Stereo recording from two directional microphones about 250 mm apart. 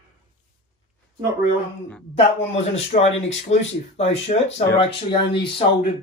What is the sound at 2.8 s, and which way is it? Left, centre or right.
Speech, left.